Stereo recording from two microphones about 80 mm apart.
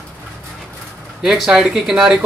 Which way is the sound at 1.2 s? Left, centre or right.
Centre.